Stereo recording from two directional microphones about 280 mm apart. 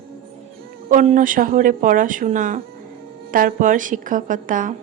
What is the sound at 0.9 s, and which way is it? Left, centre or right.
A woman's voice, right.